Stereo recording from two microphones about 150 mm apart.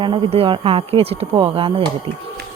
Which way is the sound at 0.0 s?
35° right (ahead or behind).